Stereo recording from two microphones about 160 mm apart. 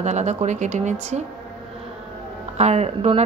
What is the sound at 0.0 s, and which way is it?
Speech, 45° right (ahead or behind).